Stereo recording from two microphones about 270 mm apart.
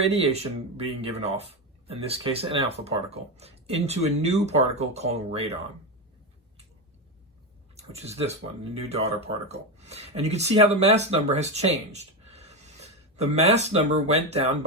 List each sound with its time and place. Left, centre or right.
0.0 s speech: right
7.8 s speech: right